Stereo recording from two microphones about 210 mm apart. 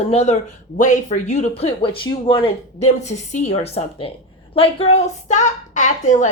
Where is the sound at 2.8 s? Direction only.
35° left (ahead or behind).